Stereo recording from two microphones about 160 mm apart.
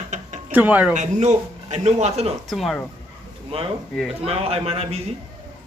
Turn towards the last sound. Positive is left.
turn(degrees=-40)  # may be behind; listen again after turning